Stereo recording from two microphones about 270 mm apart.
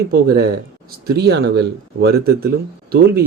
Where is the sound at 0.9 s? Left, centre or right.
Right.